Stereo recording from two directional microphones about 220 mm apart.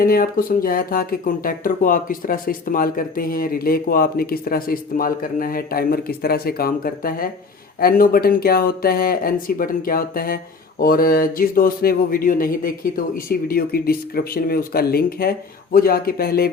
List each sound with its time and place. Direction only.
0.0 s speech: 40° left (ahead or behind)